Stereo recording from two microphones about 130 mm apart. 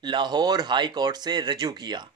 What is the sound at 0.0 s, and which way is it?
Speech, 35° right (ahead or behind).